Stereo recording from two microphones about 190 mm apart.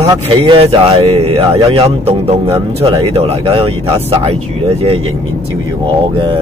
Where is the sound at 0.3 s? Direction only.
30° right (ahead or behind).